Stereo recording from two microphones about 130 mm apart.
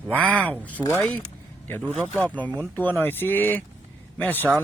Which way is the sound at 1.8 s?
10° right (ahead or behind).